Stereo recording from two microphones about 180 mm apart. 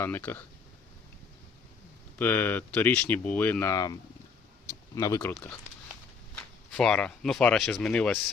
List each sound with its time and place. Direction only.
0.0 s speech: 10° left (ahead or behind)
2.1 s speech: 10° left (ahead or behind)
4.7 s a sound: 20° left (ahead or behind)
5.3 s speech: 10° left (ahead or behind)